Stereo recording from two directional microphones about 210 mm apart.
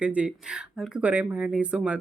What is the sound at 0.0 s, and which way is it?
Speech, 5° right (ahead or behind).